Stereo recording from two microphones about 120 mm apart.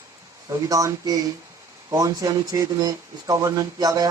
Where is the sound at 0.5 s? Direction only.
25° right (ahead or behind).